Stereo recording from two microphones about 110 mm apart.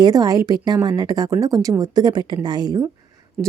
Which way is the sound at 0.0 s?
35° right (ahead or behind).